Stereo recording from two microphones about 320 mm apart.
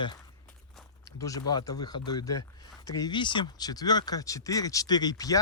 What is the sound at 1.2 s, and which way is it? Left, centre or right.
Speech, centre.